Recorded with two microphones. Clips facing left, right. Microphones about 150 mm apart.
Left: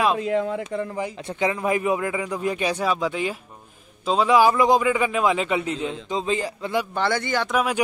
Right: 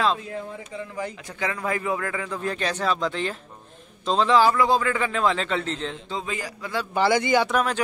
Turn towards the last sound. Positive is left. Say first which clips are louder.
# left 2 dB
turn(degrees=10)  # may be behind; listen again after turning